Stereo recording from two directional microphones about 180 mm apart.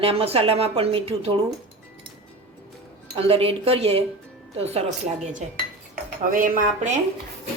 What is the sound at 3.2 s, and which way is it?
Speech, 35° right (ahead or behind).